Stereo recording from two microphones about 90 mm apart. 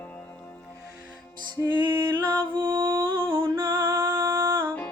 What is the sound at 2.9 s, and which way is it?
Music, 25° right (ahead or behind).